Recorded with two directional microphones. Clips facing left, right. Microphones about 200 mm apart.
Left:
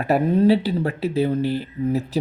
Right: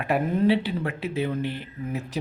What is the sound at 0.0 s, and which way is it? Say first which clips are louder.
Speech: left 5 dB; 40° left (ahead or behind).